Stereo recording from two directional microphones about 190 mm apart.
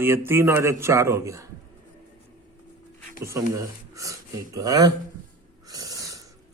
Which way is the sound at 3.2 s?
15° right (ahead or behind).